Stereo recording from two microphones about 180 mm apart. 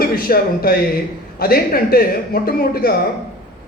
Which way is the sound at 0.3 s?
55° left (ahead or behind).